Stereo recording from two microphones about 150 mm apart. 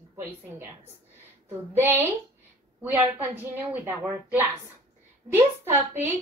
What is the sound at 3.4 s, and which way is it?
A woman's voice, 10° right (ahead or behind).